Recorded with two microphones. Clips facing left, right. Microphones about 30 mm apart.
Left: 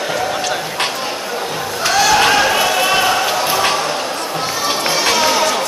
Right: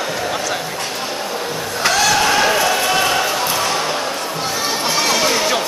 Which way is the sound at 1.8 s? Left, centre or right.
Centre.